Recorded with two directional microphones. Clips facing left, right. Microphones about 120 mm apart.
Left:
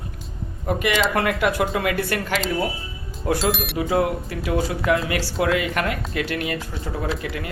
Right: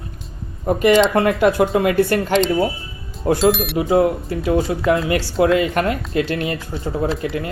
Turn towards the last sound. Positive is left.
turn(degrees=-30)  # may be behind; listen again after turning